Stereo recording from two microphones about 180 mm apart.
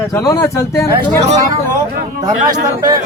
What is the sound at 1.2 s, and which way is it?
Speech, 20° right (ahead or behind).